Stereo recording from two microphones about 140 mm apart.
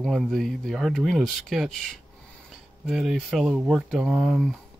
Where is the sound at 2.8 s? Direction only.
5° right (ahead or behind).